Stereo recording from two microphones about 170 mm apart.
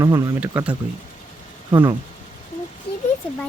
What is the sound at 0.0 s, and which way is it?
Speech, 20° right (ahead or behind).